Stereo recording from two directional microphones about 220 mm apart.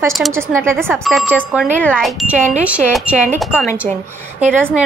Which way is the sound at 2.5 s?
5° right (ahead or behind).